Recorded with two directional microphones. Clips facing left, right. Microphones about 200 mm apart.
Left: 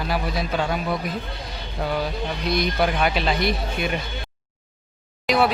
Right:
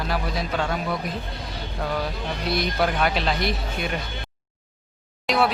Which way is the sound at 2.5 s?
Centre (ahead or behind).